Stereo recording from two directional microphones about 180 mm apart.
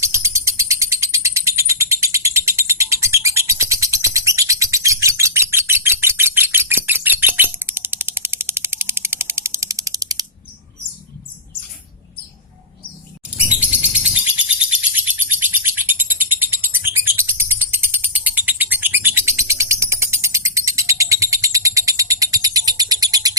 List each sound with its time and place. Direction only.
0.0 s a sound: 15° right (ahead or behind)
13.5 s chirp: 10° right (ahead or behind)
14.8 s bird: 10° right (ahead or behind)